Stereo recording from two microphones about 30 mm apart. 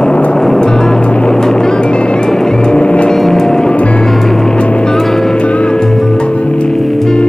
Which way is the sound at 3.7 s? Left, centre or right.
Left.